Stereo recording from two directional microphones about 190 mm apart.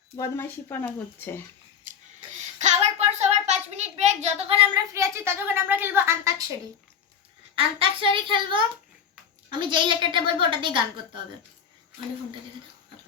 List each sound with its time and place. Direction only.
0.2 s speech: 10° left (ahead or behind)
2.6 s a sound: 35° right (ahead or behind)
4.7 s a woman's voice: 15° right (ahead or behind)
7.5 s a woman's voice: 25° right (ahead or behind)